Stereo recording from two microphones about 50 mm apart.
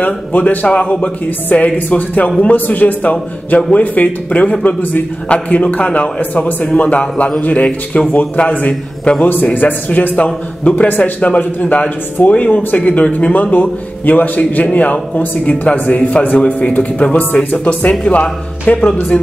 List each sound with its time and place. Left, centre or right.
0.0 s a man's voice: left